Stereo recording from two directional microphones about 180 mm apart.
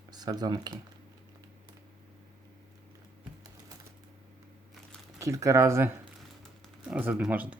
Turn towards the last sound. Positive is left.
turn(degrees=-10)  # may be behind; listen again after turning